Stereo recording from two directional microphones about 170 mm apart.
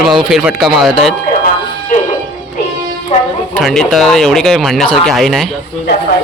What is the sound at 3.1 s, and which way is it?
Music, 35° left (ahead or behind).